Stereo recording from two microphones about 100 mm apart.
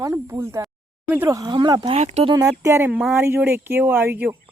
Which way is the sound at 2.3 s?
30° right (ahead or behind).